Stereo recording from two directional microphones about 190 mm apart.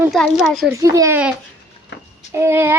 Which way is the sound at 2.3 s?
10° right (ahead or behind).